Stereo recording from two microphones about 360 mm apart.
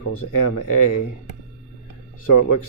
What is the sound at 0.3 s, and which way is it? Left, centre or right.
Speech, left.